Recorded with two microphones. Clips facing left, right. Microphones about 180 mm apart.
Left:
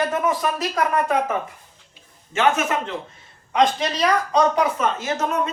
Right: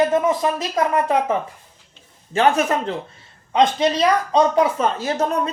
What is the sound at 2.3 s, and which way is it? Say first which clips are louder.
Speech: right 3 dB; 35° right (ahead or behind).